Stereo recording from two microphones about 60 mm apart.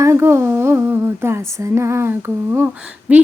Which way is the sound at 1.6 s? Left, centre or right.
Right.